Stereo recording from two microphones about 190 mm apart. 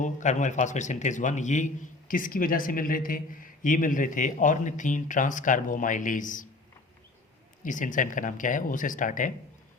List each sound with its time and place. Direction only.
0.0 s a man's voice: 40° left (ahead or behind)
7.6 s a man's voice: 45° left (ahead or behind)